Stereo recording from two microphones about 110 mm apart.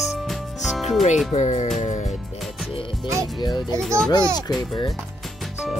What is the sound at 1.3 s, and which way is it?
Speech, 90° left.